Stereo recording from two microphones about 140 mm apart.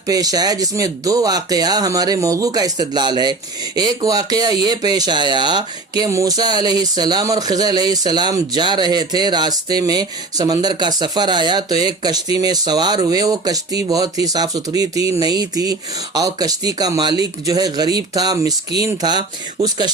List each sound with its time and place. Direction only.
0.1 s speech: 25° right (ahead or behind)